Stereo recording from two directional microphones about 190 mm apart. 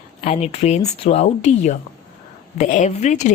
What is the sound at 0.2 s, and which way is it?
Speech, 35° left (ahead or behind).